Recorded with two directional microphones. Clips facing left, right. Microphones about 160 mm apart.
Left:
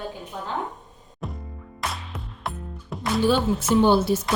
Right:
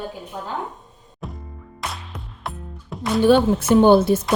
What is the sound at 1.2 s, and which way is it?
Music, centre (ahead or behind).